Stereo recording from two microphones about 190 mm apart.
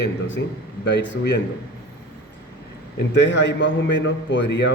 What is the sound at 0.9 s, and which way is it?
Speech, 65° left (ahead or behind).